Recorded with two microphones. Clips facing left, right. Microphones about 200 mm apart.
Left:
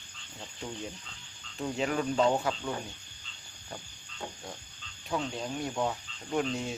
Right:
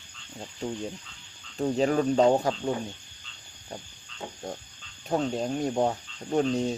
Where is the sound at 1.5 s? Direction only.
40° right (ahead or behind).